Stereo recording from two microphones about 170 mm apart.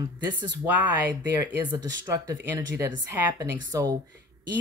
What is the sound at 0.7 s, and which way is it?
Speech, 10° right (ahead or behind).